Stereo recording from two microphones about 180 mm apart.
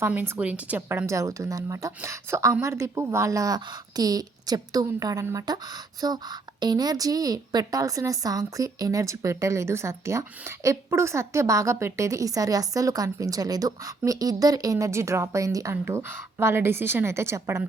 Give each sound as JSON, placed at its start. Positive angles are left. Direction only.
{"t": 0.0, "sound": "a woman's voice", "side_deg": -10}